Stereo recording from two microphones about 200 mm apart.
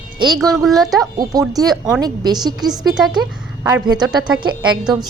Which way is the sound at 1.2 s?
20° right (ahead or behind).